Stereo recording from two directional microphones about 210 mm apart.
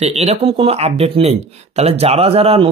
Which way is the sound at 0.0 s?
30° right (ahead or behind).